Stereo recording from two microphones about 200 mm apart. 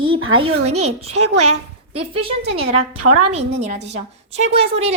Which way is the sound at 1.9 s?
30° right (ahead or behind).